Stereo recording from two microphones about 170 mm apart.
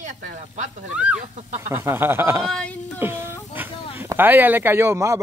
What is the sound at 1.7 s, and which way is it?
Speech, 15° right (ahead or behind).